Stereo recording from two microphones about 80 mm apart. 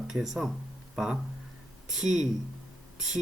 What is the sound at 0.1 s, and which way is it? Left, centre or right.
Speech, centre.